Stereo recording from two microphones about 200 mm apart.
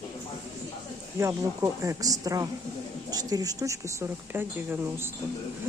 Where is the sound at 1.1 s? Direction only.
15° right (ahead or behind).